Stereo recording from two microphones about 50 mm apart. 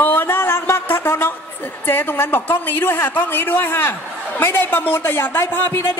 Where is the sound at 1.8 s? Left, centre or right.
Left.